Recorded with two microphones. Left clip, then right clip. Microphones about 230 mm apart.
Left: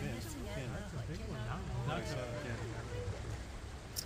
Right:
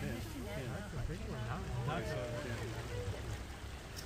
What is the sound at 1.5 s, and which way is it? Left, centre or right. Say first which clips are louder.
Vehicle: even; left.